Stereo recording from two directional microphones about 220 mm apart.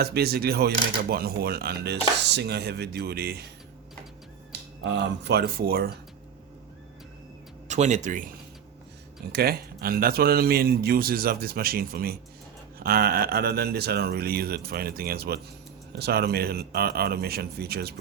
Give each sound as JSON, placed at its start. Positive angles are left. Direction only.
{"t": 0.0, "sound": "speech", "side_deg": -45}
{"t": 4.8, "sound": "speech", "side_deg": -50}
{"t": 7.7, "sound": "speech", "side_deg": -30}
{"t": 9.3, "sound": "speech", "side_deg": -45}